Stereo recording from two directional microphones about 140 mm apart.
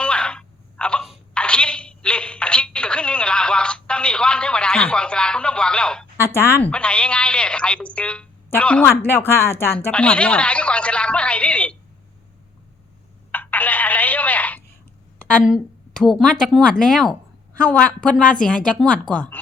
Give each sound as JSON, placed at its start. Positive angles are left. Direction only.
{"t": 0.0, "sound": "telephone", "side_deg": 5}
{"t": 6.1, "sound": "speech", "side_deg": 20}
{"t": 6.7, "sound": "telephone", "side_deg": 10}
{"t": 13.3, "sound": "telephone", "side_deg": 15}
{"t": 15.4, "sound": "speech", "side_deg": 0}